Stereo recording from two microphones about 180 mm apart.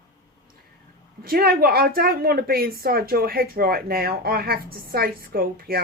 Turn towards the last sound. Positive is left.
turn(degrees=-55)  # may be behind; listen again after turning